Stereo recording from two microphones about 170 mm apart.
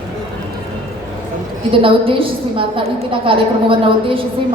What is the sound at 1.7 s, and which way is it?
A woman's voice, 30° right (ahead or behind).